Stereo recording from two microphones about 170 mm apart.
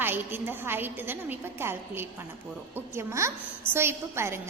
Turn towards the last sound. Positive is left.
turn(degrees=-15)  # may be behind; listen again after turning